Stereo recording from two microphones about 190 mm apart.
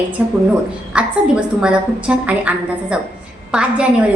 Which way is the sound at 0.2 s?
10° right (ahead or behind).